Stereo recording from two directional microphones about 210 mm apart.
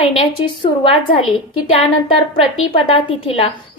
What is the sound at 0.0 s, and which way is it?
A woman's voice, 25° left (ahead or behind).